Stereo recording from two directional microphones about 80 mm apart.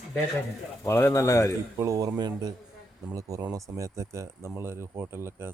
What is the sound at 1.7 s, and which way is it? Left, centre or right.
Speech, right.